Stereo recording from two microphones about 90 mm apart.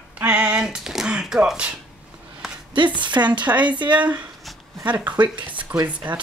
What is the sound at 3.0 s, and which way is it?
Speech, 60° right (ahead or behind).